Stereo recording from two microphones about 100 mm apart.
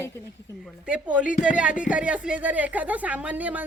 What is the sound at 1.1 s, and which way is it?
Speech, 10° right (ahead or behind).